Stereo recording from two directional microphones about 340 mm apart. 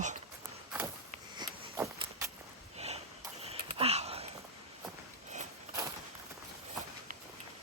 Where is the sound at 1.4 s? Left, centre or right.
Centre.